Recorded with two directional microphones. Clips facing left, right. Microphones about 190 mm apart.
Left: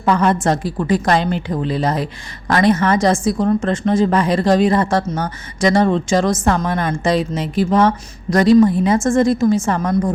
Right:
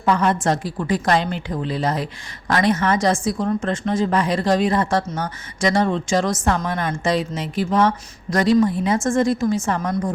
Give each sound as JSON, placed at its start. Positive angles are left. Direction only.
{"t": 0.0, "sound": "a woman's voice", "side_deg": 40}